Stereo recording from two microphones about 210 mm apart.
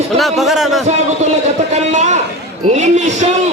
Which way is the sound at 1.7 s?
35° right (ahead or behind).